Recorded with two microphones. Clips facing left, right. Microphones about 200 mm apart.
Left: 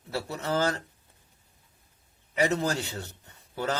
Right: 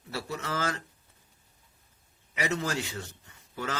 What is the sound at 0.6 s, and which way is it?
Speech, 35° left (ahead or behind).